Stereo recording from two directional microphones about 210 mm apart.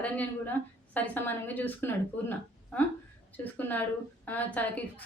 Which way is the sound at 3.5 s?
10° left (ahead or behind).